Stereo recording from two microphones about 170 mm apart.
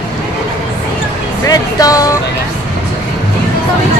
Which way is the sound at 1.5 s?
20° left (ahead or behind).